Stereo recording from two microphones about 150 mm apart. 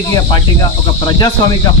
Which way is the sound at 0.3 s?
30° left (ahead or behind).